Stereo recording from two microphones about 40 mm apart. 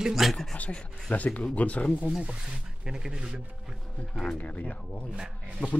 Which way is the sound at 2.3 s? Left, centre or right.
Centre.